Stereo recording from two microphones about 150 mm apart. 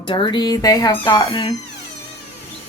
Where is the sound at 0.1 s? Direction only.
35° left (ahead or behind).